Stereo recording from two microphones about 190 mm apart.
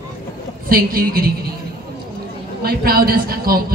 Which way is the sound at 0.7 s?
50° right (ahead or behind).